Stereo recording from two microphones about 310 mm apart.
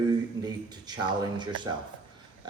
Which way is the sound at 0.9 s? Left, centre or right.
Centre.